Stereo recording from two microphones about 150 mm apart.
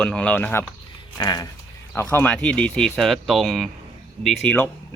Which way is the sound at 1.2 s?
25° left (ahead or behind).